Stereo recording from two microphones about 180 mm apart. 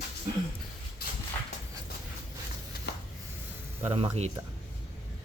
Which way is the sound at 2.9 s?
65° left (ahead or behind).